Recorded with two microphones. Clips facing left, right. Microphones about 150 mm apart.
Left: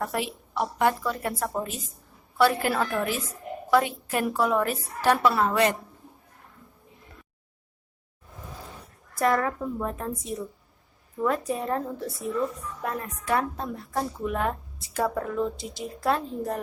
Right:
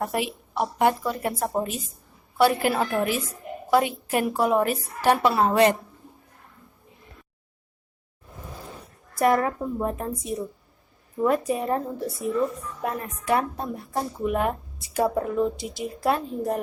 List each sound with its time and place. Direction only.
0.0 s a woman's voice: 15° right (ahead or behind)
9.1 s a woman's voice: 15° right (ahead or behind)